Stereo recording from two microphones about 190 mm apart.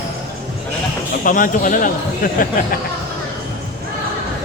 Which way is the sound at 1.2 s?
45° left (ahead or behind).